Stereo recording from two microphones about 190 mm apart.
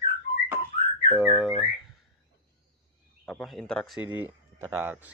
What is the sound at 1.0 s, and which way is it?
Speech, centre (ahead or behind).